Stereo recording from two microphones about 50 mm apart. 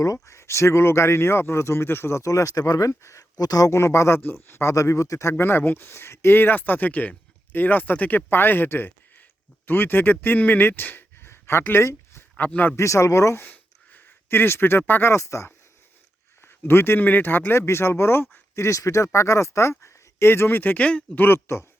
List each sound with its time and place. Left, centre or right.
0.3 s speech: left
5.3 s speech: left
8.3 s speech: left
12.4 s speech: left
12.7 s speech: left
13.4 s a sound: left
15.1 s speech: left
16.4 s speech: left
19.8 s speech: left
20.7 s speech: left
21.2 s speech: left